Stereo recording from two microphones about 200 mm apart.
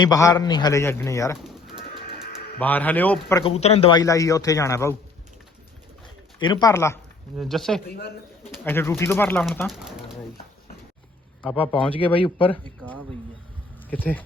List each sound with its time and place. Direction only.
0.0 s a man's voice: 15° left (ahead or behind)
2.6 s a man's voice: 10° left (ahead or behind)
3.4 s a man's voice: 30° left (ahead or behind); by 4.9 s 15° left (ahead or behind)
6.4 s a man's voice: 20° left (ahead or behind)
7.3 s speech: centre (ahead or behind)
7.9 s speech: 50° left (ahead or behind)
8.6 s a man's voice: 10° left (ahead or behind)
9.6 s speech: 5° right (ahead or behind)
11.4 s a man's voice: 5° right (ahead or behind)
11.7 s speech: 25° left (ahead or behind)
13.9 s a man's voice: 10° left (ahead or behind)